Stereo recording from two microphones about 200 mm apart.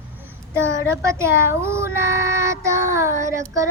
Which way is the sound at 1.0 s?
15° right (ahead or behind).